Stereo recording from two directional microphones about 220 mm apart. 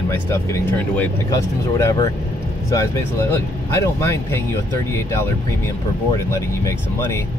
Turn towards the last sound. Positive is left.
turn(degrees=15)  # may be behind; listen again after turning